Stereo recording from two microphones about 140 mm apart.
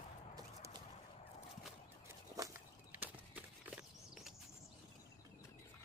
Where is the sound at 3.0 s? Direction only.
10° right (ahead or behind).